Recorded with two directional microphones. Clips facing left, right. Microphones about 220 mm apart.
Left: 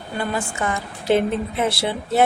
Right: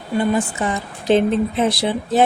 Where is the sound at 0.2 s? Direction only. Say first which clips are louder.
Right 6 dB; 20° right (ahead or behind).